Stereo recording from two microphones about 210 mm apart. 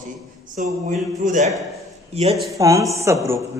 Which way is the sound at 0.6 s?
35° right (ahead or behind).